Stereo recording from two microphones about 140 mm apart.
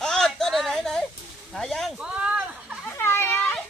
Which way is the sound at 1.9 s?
5° right (ahead or behind).